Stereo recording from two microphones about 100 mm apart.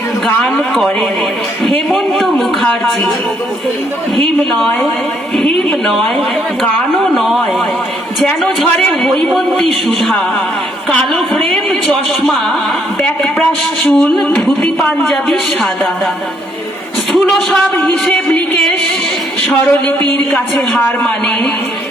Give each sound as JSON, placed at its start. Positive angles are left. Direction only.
{"t": 0.3, "sound": "a man's voice", "side_deg": 10}
{"t": 1.9, "sound": "speech", "side_deg": 0}
{"t": 2.6, "sound": "a man's voice", "side_deg": 15}
{"t": 4.5, "sound": "speech", "side_deg": 5}
{"t": 13.8, "sound": "a man's voice", "side_deg": 15}
{"t": 17.1, "sound": "a man's voice", "side_deg": 5}
{"t": 20.8, "sound": "a man's voice", "side_deg": 15}